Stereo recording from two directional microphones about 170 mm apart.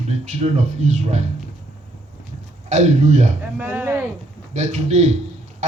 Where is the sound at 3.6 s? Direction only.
10° right (ahead or behind).